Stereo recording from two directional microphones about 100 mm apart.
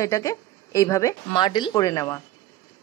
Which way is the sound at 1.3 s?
50° left (ahead or behind).